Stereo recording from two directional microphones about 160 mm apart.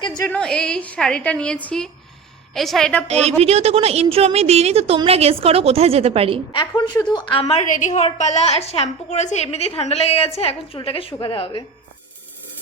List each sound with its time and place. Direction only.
0.0 s a sound: 25° left (ahead or behind)
0.3 s a woman's voice: 5° left (ahead or behind)
3.1 s a woman's voice: 40° right (ahead or behind)
6.5 s a woman's voice: 30° left (ahead or behind)
7.7 s a woman's voice: 50° left (ahead or behind); by 11.6 s 30° left (ahead or behind)